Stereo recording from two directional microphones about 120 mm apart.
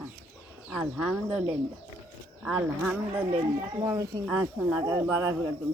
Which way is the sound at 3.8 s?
30° right (ahead or behind).